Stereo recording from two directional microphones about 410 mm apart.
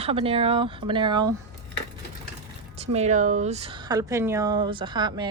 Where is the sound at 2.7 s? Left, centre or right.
Centre.